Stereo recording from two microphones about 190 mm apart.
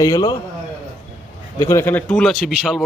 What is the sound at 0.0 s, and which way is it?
Speech, 20° left (ahead or behind).